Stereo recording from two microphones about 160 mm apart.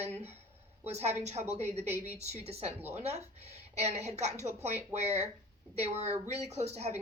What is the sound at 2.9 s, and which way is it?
A woman's voice, 40° right (ahead or behind).